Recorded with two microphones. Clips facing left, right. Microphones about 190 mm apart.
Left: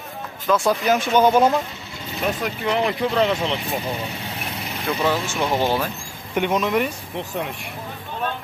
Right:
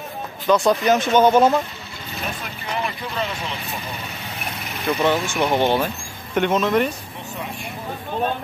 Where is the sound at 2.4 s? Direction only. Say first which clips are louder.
Left 6 dB; 70° left (ahead or behind).